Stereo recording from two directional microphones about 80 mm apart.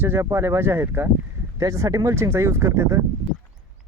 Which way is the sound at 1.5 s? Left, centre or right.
Right.